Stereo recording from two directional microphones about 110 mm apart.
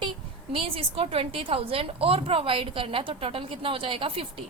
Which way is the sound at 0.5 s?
60° right (ahead or behind).